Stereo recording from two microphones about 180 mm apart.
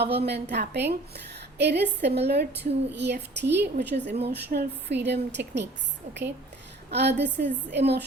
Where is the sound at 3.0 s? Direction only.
70° right (ahead or behind).